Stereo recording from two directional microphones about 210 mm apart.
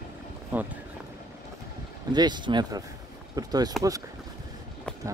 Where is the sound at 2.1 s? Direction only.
20° right (ahead or behind).